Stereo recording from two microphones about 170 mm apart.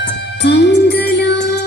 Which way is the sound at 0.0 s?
90° left.